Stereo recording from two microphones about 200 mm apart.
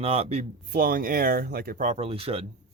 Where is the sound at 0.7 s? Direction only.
45° right (ahead or behind); by 2.4 s 30° right (ahead or behind).